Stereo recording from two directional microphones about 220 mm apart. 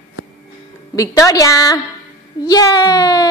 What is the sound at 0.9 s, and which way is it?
A woman's voice, 15° left (ahead or behind).